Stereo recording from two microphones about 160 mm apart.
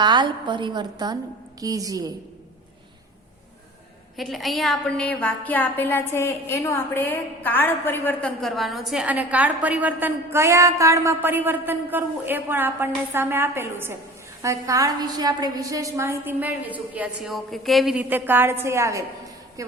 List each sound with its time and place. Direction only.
0.0 s a woman's voice: 30° right (ahead or behind)
4.2 s a woman's voice: centre (ahead or behind)
18.1 s a woman's voice: 10° right (ahead or behind)